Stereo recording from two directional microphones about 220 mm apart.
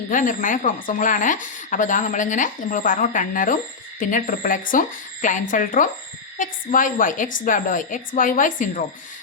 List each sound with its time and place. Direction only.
0.1 s a woman's voice: 35° left (ahead or behind)